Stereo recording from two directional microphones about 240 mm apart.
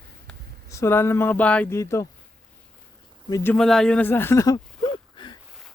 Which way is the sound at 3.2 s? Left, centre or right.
Centre.